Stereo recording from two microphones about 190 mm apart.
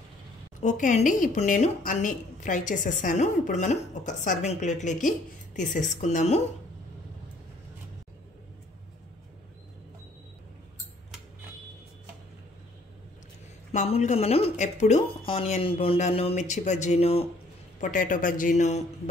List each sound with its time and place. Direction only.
0.6 s a woman's voice: 40° left (ahead or behind)
13.7 s a woman's voice: 35° left (ahead or behind)
17.7 s a woman's voice: 45° left (ahead or behind)